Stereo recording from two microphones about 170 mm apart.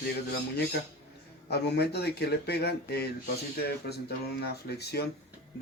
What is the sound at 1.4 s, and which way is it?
Speech, 75° left (ahead or behind).